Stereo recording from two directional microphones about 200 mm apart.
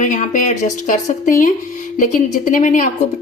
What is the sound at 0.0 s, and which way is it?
A woman's voice, 40° left (ahead or behind).